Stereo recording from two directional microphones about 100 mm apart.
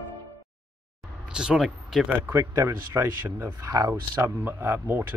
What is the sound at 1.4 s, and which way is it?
Speech, 5° right (ahead or behind).